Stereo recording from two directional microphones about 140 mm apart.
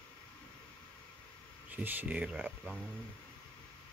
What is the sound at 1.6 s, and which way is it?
Speech, 10° right (ahead or behind).